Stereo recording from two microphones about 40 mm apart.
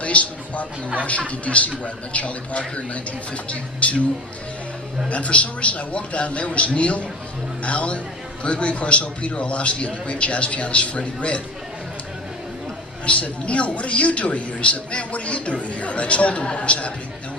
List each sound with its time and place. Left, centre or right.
0.0 s a sound: left
1.3 s a man's voice: left
5.0 s a man's voice: left
13.1 s a man's voice: left